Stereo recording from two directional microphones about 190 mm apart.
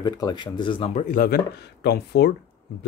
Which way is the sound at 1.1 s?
50° left (ahead or behind).